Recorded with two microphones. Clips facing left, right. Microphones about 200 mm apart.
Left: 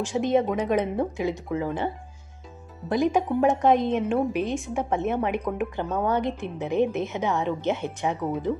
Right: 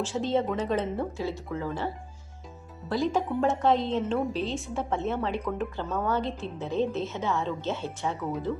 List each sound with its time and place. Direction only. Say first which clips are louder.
0.0 s a woman's voice: left 4 dB; 15° left (ahead or behind)
2.9 s a woman's voice: left 4 dB; 15° left (ahead or behind)